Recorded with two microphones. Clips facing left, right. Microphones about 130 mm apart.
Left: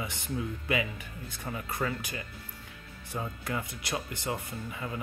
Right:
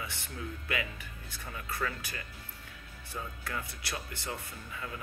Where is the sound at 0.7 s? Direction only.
20° left (ahead or behind).